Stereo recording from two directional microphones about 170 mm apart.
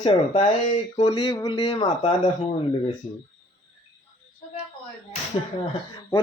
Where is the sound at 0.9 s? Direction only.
30° left (ahead or behind).